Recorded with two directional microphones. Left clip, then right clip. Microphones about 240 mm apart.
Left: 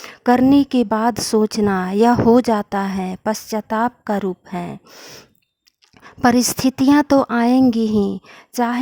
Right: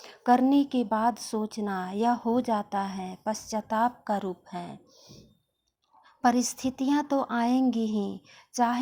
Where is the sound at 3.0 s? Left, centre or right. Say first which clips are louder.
Left 10 dB; left.